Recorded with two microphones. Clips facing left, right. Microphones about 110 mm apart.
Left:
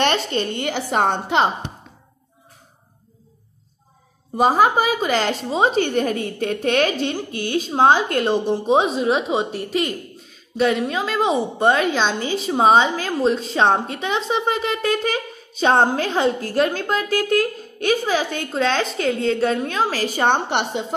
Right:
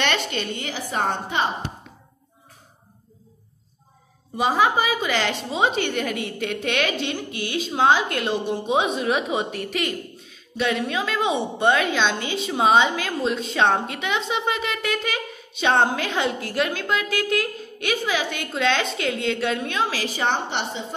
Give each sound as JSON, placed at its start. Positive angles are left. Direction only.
{"t": 0.0, "sound": "a woman's voice", "side_deg": 40}
{"t": 0.7, "sound": "a woman's voice", "side_deg": 70}
{"t": 4.4, "sound": "a woman's voice", "side_deg": 45}